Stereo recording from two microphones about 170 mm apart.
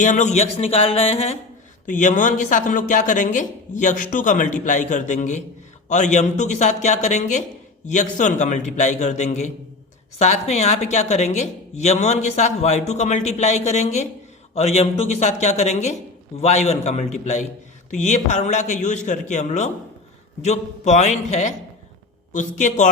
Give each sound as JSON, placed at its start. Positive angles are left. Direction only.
{"t": 0.0, "sound": "speech", "side_deg": 45}
{"t": 1.9, "sound": "speech", "side_deg": 45}